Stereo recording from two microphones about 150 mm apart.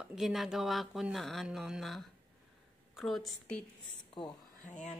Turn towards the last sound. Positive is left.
turn(degrees=55)  # may be behind; listen again after turning